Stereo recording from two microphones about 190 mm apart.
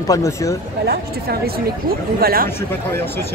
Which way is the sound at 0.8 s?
55° right (ahead or behind).